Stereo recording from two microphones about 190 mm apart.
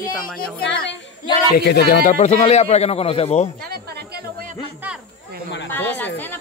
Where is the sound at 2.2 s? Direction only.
35° left (ahead or behind).